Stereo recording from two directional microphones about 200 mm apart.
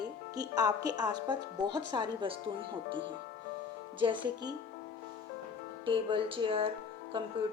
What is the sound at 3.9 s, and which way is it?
Speech, 25° right (ahead or behind).